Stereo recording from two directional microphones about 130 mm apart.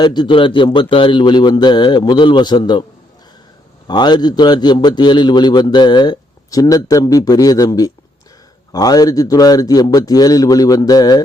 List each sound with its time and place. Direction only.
0.0 s a man's voice: 35° left (ahead or behind)
3.8 s a man's voice: 35° left (ahead or behind)